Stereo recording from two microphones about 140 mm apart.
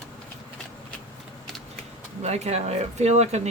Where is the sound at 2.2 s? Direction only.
50° right (ahead or behind).